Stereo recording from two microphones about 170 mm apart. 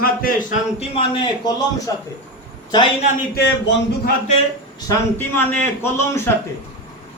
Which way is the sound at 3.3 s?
80° left.